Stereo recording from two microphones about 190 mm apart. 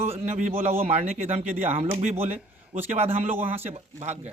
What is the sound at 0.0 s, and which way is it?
Speech, 35° right (ahead or behind).